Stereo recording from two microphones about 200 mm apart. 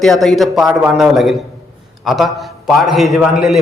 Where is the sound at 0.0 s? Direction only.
Centre (ahead or behind).